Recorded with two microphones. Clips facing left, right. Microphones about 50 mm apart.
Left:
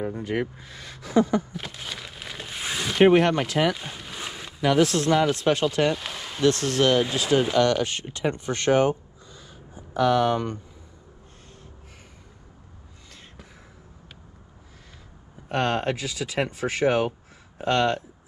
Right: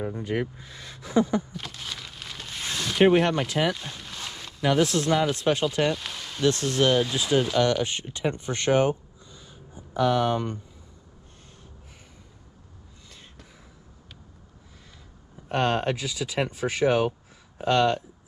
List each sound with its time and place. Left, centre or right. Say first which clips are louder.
0.1 s speech: left 1 dB; left
1.5 s a sound: left 1 dB; centre
3.1 s speech: left 2 dB; left
3.7 s a sound: left 2 dB; centre
4.7 s speech: left 3 dB; left
5.9 s a sound: left 2 dB; centre
6.4 s speech: left 2 dB; left
7.2 s speech: left 3 dB; left
7.6 s speech: left 2 dB; left
10.3 s speech: left 1 dB; left
15.5 s speech: even; left